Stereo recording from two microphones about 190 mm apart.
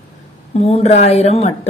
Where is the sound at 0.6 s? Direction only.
35° left (ahead or behind).